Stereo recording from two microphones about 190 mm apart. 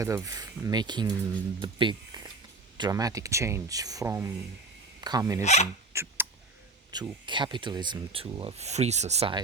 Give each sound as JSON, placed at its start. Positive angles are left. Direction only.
{"t": 0.0, "sound": "speech", "side_deg": -15}
{"t": 5.4, "sound": "speech", "side_deg": 35}
{"t": 5.9, "sound": "a sound", "side_deg": -15}
{"t": 6.9, "sound": "speech", "side_deg": -25}